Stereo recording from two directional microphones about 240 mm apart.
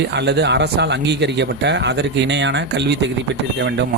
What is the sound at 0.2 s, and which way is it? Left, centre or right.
Speech, right.